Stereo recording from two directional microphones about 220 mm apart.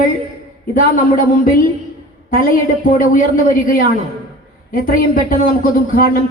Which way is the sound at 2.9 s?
35° left (ahead or behind).